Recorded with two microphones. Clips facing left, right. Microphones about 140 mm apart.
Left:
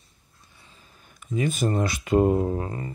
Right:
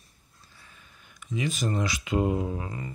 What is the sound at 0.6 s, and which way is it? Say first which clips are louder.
Speech: left 2 dB; 30° left (ahead or behind).